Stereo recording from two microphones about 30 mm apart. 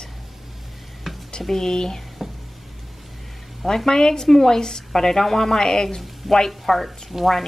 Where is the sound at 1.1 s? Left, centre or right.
Centre.